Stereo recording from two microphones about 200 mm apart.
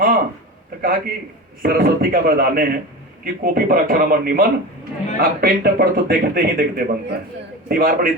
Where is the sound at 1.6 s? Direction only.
45° right (ahead or behind).